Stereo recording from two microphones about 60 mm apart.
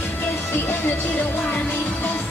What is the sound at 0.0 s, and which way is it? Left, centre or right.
Music, left.